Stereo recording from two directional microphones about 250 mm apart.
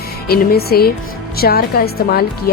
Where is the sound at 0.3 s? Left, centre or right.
Left.